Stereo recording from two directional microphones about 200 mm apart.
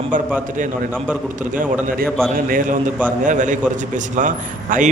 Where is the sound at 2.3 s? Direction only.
45° right (ahead or behind).